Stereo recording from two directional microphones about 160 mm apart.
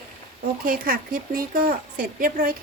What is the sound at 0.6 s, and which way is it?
Speech, 60° right (ahead or behind).